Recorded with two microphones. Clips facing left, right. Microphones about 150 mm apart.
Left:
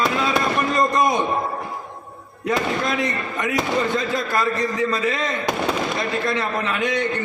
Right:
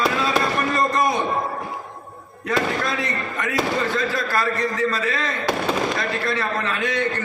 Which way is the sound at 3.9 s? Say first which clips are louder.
Left 1 dB; 20° left (ahead or behind).